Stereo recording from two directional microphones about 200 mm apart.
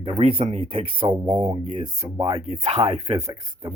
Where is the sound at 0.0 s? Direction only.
30° right (ahead or behind).